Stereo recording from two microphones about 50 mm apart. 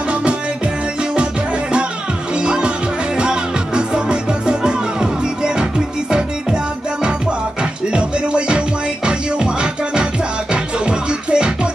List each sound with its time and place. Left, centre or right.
0.1 s music: right
2.3 s music: centre
7.9 s music: right